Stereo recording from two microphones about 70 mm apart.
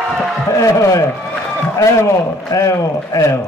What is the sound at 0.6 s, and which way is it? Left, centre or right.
Speech, left.